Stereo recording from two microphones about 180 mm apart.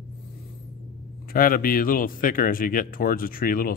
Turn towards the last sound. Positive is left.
turn(degrees=50)  # may be behind; listen again after turning